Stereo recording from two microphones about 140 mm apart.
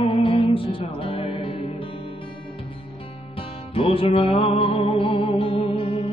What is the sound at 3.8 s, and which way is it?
Music, 40° left (ahead or behind).